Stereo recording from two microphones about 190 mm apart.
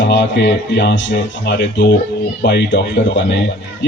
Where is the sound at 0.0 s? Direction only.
65° left (ahead or behind).